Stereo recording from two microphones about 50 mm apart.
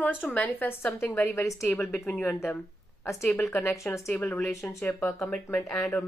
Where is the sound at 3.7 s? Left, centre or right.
Left.